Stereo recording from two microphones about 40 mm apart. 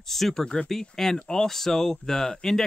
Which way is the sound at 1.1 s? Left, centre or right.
Left.